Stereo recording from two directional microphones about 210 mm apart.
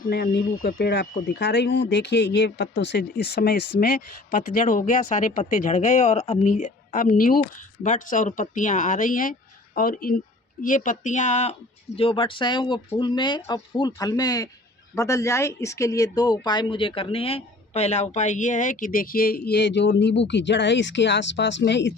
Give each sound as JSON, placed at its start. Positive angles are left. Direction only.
{"t": 0.1, "sound": "speech", "side_deg": 45}
{"t": 3.8, "sound": "speech", "side_deg": 40}